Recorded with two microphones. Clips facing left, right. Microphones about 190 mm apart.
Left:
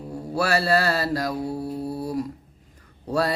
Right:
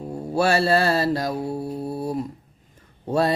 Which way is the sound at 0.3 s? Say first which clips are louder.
Right 3 dB; 25° right (ahead or behind).